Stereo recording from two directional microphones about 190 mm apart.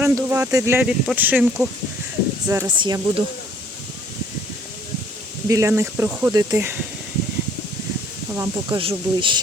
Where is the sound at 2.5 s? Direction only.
20° right (ahead or behind).